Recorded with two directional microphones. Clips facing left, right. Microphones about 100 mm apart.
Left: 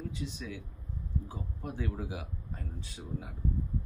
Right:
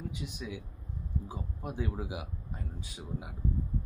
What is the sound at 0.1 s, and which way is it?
Speech, 15° right (ahead or behind).